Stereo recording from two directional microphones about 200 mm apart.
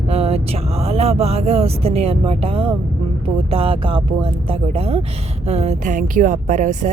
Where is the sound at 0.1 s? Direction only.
30° right (ahead or behind).